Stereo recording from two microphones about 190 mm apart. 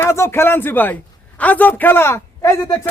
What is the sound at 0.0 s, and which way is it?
Speech, 15° left (ahead or behind).